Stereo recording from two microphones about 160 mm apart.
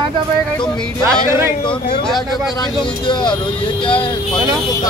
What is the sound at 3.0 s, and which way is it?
Speech, 30° left (ahead or behind).